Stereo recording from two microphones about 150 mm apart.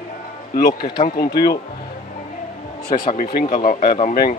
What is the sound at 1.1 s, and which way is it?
Speech, 90° left.